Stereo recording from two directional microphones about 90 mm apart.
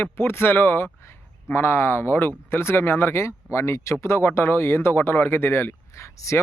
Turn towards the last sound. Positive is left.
turn(degrees=35)  # may be behind; listen again after turning